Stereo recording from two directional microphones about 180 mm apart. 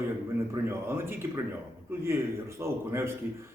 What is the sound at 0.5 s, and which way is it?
A man's voice, 15° right (ahead or behind).